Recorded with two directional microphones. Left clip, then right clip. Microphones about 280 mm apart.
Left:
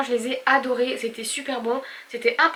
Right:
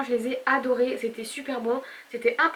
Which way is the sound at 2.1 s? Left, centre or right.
Centre.